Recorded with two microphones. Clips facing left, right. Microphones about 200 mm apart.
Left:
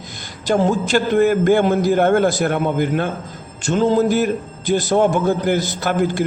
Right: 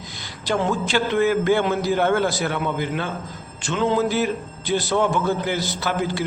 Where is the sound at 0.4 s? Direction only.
45° left (ahead or behind).